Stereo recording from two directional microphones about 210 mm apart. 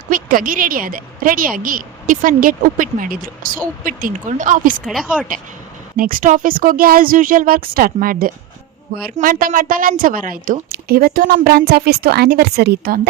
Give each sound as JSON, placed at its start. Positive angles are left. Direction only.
{"t": 0.1, "sound": "a woman's voice", "side_deg": -40}
{"t": 4.9, "sound": "speech", "side_deg": 0}
{"t": 6.0, "sound": "a woman's voice", "side_deg": -40}